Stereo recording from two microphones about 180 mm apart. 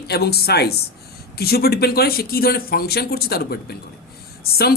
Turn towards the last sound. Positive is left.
turn(degrees=60)  # may be behind; listen again after turning